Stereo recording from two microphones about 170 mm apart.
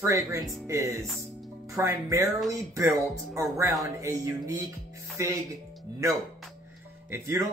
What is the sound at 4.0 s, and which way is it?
Speech, 20° right (ahead or behind).